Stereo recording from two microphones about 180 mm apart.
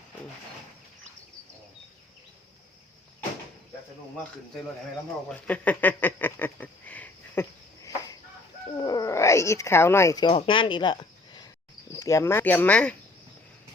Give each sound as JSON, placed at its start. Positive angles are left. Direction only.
{"t": 5.3, "sound": "speech", "side_deg": 10}
{"t": 8.8, "sound": "speech", "side_deg": 20}
{"t": 11.9, "sound": "speech", "side_deg": 15}